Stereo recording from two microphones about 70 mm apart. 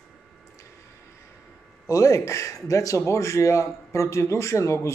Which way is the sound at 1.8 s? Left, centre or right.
Left.